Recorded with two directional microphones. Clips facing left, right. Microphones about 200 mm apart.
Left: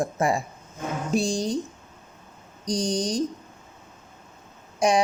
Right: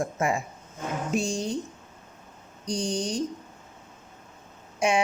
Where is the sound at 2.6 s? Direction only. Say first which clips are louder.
Left 3 dB; 35° left (ahead or behind).